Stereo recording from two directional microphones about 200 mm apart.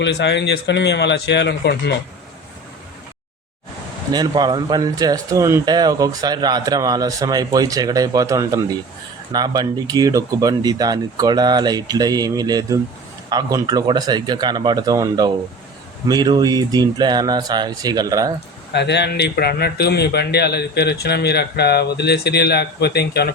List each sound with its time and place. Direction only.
0.0 s speech: 60° left (ahead or behind)
4.1 s speech: 20° right (ahead or behind)
18.7 s speech: 60° left (ahead or behind)